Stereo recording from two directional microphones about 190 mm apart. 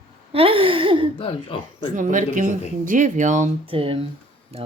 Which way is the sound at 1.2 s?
30° left (ahead or behind).